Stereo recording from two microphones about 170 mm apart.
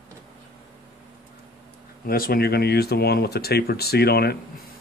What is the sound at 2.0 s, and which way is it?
Speech, 60° left (ahead or behind).